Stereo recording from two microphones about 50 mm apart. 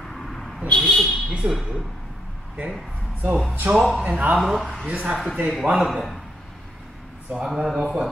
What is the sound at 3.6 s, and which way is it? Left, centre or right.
Speech, right.